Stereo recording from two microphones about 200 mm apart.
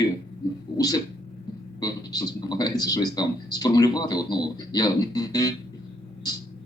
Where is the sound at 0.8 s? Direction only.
20° left (ahead or behind).